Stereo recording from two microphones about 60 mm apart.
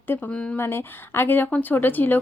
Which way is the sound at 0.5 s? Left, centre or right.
Left.